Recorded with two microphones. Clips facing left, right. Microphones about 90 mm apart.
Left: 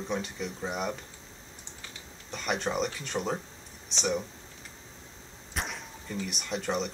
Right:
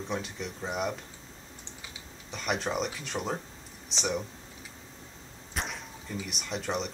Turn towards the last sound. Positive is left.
turn(degrees=0)  # may be behind; listen again after turning